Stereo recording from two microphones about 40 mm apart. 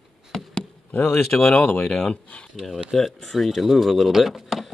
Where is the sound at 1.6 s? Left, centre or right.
Left.